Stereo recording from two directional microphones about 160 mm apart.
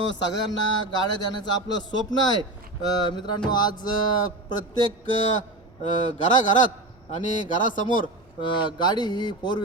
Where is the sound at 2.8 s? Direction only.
25° left (ahead or behind).